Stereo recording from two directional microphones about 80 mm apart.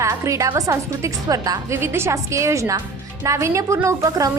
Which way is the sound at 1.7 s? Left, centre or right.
Right.